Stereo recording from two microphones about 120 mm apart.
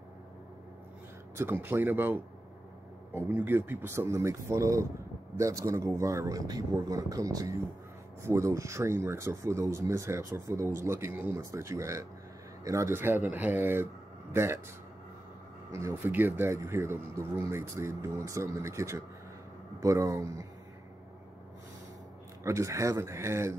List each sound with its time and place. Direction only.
1.3 s speech: 20° right (ahead or behind)
3.3 s speech: 20° right (ahead or behind)
15.7 s speech: 25° right (ahead or behind)
22.4 s speech: 25° right (ahead or behind)